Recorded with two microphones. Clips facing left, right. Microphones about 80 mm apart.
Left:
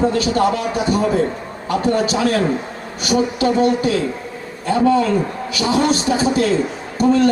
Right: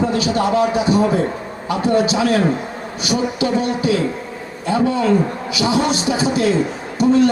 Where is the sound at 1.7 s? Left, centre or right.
Left.